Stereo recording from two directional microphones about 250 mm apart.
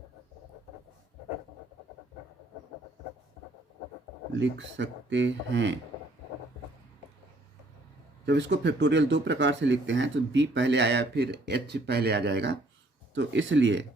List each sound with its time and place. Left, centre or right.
4.3 s speech: right
8.2 s speech: right